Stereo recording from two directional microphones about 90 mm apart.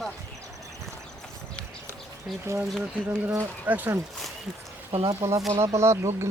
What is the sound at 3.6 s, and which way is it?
Speech, 20° right (ahead or behind).